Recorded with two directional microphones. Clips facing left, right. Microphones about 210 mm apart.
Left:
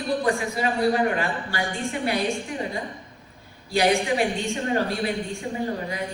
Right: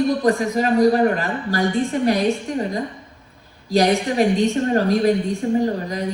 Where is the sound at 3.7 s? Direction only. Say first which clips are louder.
Right 4 dB; 40° right (ahead or behind).